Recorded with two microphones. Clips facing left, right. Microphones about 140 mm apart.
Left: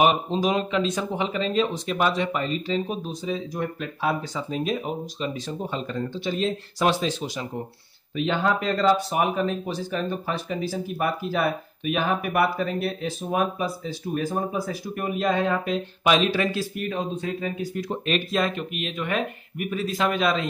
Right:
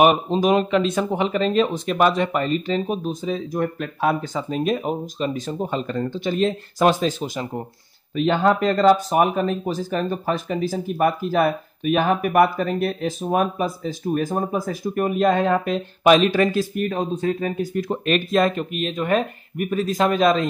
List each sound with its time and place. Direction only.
0.0 s speech: 55° right (ahead or behind)